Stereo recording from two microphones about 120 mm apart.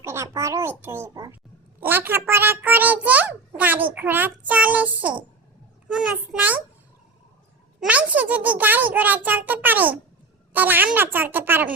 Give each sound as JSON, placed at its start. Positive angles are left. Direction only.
{"t": 0.0, "sound": "a child's voice", "side_deg": -20}
{"t": 7.8, "sound": "a child's voice", "side_deg": -10}